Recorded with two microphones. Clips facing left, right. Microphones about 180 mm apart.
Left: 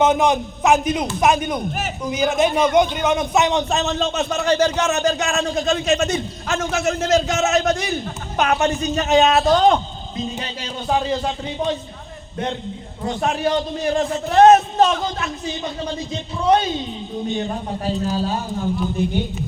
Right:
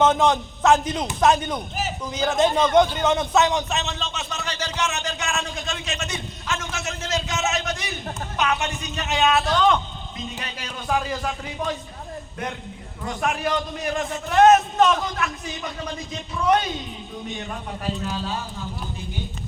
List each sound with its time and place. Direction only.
0.0 s a man's voice: 10° left (ahead or behind); by 11.8 s 25° left (ahead or behind)
13.0 s a man's voice: 30° left (ahead or behind); by 18.7 s 45° left (ahead or behind)